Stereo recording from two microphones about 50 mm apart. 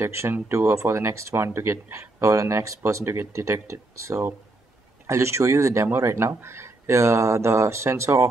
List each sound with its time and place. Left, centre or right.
0.0 s speech: right